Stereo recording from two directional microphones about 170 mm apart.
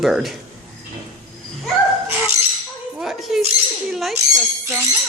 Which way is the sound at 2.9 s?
Centre (ahead or behind).